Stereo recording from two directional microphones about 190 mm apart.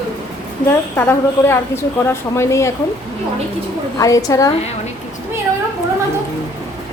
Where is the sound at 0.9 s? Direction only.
10° left (ahead or behind).